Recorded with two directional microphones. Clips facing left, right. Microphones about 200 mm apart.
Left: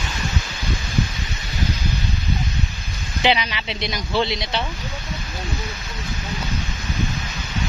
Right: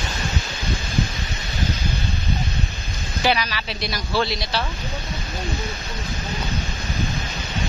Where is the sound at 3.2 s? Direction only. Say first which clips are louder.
Left 1 dB; 20° left (ahead or behind).